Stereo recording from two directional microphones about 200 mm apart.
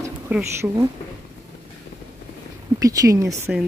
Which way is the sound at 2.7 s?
15° right (ahead or behind).